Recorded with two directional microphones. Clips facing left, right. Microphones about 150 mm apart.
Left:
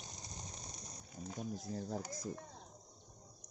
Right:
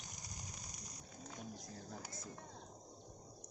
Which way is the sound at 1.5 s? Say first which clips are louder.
Left 9 dB; 30° left (ahead or behind).